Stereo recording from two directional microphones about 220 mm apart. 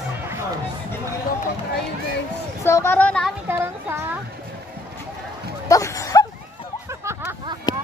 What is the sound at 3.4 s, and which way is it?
Speech, 10° right (ahead or behind).